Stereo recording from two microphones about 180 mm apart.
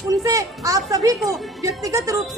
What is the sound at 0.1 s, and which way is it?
Speech, 20° right (ahead or behind).